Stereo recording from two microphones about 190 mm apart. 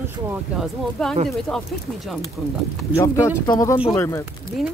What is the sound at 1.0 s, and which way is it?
Speech, centre (ahead or behind).